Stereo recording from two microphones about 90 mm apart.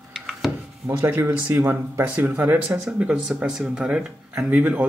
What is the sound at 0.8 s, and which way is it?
Speech, 25° right (ahead or behind).